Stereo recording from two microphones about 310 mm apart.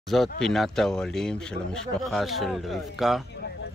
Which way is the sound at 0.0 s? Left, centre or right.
Centre.